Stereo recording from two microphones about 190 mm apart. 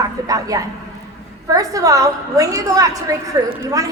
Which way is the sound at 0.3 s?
20° right (ahead or behind).